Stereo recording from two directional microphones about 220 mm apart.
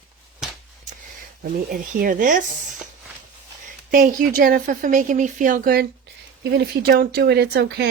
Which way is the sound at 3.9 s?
40° right (ahead or behind).